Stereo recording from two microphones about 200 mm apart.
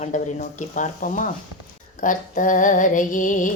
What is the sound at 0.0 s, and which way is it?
Female singing, 40° left (ahead or behind).